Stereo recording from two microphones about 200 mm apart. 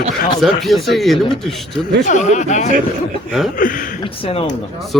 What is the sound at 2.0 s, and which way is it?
Speech, 35° left (ahead or behind).